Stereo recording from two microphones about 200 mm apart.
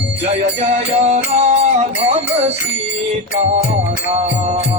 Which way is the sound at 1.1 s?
30° right (ahead or behind).